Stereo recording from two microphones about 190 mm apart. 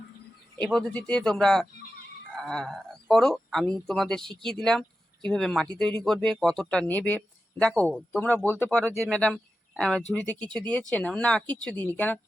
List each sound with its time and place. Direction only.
0.7 s speech: 5° left (ahead or behind)
8.8 s speech: 15° right (ahead or behind)
9.0 s speech: 5° left (ahead or behind)